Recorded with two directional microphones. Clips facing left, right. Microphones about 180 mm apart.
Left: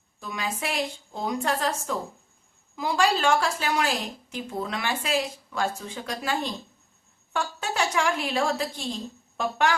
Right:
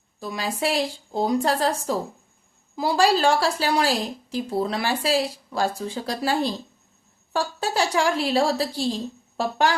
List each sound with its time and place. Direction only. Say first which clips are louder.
0.2 s a woman's voice: right 5 dB; 35° right (ahead or behind)